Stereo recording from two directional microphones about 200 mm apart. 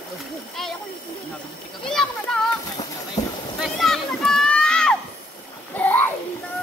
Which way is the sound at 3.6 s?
Centre (ahead or behind).